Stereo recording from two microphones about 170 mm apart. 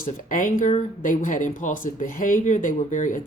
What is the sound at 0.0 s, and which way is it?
Speech, 50° left (ahead or behind).